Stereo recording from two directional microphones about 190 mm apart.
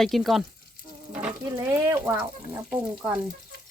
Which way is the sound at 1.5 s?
15° right (ahead or behind).